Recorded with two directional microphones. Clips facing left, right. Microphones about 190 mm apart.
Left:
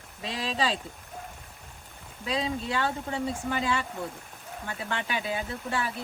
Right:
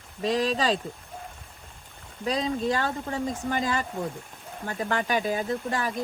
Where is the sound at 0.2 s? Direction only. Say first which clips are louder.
Right 6 dB; 45° right (ahead or behind).